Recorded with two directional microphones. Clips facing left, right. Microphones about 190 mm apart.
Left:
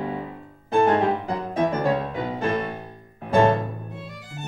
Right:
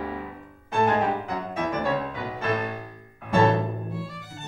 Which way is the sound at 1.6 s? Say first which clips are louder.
Left 4 dB; 35° left (ahead or behind).